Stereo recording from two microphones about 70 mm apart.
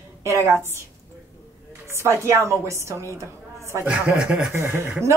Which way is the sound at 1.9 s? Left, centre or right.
Right.